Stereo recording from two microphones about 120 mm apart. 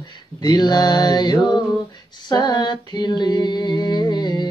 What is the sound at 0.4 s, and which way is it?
Mantra, 35° left (ahead or behind).